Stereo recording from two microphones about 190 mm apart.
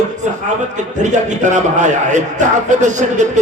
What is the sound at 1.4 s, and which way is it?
Speech, 40° right (ahead or behind).